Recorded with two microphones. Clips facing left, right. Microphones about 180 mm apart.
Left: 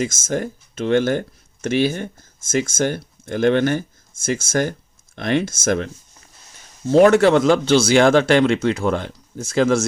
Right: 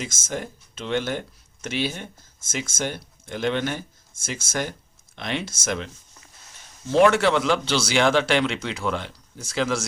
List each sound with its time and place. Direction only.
0.0 s speech: 50° left (ahead or behind)
6.8 s speech: 40° left (ahead or behind)